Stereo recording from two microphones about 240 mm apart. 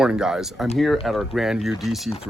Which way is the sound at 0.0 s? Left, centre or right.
Centre.